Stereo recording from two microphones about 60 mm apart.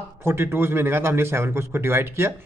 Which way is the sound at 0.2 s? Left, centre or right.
Right.